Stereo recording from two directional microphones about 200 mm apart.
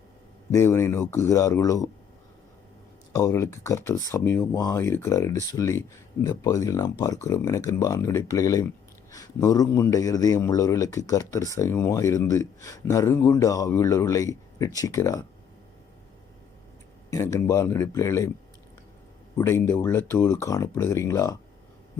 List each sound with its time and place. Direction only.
0.5 s a man's voice: 15° left (ahead or behind)
3.2 s a man's voice: 15° left (ahead or behind)
17.1 s a man's voice: 15° left (ahead or behind)
19.4 s a man's voice: 10° left (ahead or behind)